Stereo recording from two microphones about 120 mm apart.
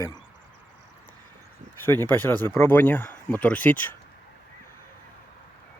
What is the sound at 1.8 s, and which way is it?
Speech, 20° left (ahead or behind).